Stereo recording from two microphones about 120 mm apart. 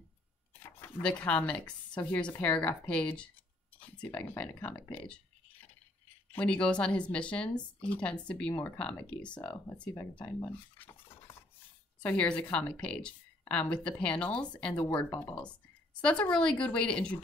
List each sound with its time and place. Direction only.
0.7 s a woman's voice: 15° left (ahead or behind)
4.9 s a sound: 10° left (ahead or behind)
6.3 s a woman's voice: 10° left (ahead or behind)
12.0 s a woman's voice: 10° left (ahead or behind)